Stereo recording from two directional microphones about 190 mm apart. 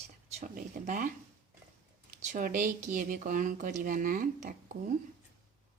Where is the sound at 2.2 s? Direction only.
40° right (ahead or behind).